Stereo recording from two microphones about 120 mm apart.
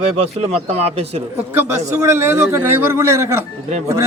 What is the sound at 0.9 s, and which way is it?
Speech, 60° right (ahead or behind).